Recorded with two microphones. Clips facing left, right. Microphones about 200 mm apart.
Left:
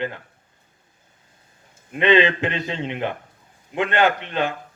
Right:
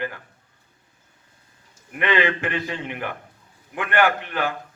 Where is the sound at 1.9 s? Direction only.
20° left (ahead or behind).